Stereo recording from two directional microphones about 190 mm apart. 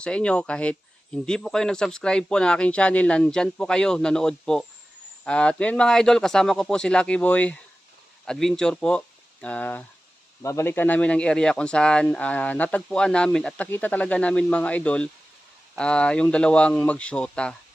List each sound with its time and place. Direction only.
0.0 s speech: 5° left (ahead or behind)